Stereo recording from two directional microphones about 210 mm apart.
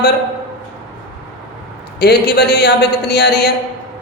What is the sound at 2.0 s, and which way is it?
Speech, 50° left (ahead or behind).